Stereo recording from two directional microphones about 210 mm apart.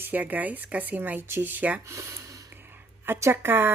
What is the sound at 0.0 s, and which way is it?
Speech, 10° right (ahead or behind).